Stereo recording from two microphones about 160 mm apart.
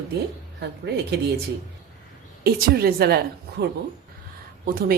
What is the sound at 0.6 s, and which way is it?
Speech, 90° right.